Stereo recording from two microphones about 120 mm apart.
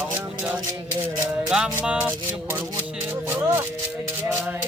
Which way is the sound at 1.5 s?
5° right (ahead or behind).